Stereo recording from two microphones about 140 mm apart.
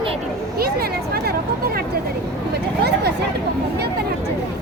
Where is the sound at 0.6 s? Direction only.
90° right.